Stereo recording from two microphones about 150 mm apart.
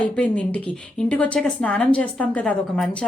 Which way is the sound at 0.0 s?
10° left (ahead or behind).